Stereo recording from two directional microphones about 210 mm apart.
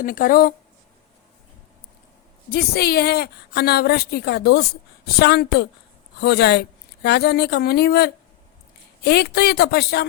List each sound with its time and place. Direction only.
0.0 s a woman's voice: 40° left (ahead or behind)
2.5 s a woman's voice: 50° left (ahead or behind)